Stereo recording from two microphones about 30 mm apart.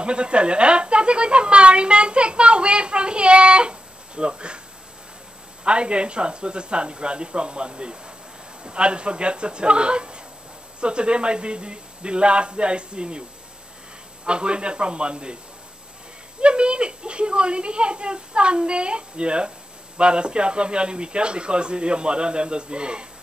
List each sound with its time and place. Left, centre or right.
0.0 s a sound: right
5.6 s speech: right
14.2 s speech: right
16.3 s speech: right